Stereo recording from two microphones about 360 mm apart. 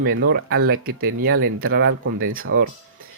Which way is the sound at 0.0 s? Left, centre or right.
Right.